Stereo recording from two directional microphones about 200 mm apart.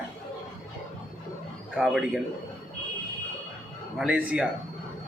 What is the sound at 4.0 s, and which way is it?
Speech, 5° right (ahead or behind).